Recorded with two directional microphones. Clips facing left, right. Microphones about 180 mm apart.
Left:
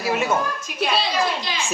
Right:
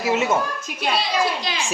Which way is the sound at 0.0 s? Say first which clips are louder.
Right 2 dB; 25° right (ahead or behind).